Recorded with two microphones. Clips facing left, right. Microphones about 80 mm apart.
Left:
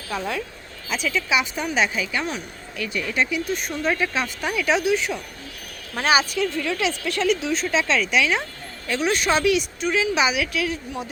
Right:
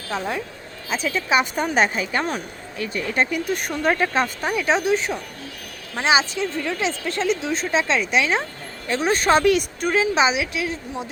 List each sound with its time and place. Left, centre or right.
0.1 s a woman's voice: right
5.9 s a woman's voice: right